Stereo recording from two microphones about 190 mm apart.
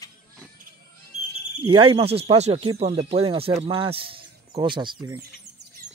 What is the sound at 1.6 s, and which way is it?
Speech, 25° right (ahead or behind).